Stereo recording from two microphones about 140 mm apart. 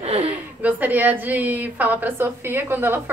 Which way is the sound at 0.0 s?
45° right (ahead or behind).